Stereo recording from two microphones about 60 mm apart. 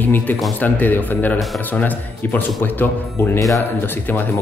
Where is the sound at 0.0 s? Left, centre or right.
Left.